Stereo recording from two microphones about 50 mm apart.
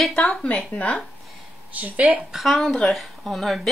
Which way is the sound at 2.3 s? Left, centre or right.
Centre.